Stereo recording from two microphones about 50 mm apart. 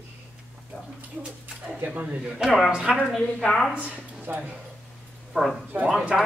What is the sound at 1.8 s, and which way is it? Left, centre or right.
Speech, right.